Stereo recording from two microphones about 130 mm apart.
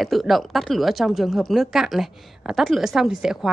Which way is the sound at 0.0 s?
Centre (ahead or behind).